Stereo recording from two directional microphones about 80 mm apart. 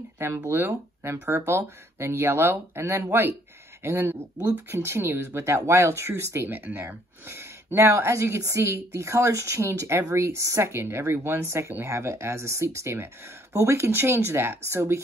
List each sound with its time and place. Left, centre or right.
0.2 s speech: right